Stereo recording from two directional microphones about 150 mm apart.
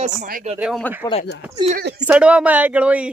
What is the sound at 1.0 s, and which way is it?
Speech, 20° left (ahead or behind).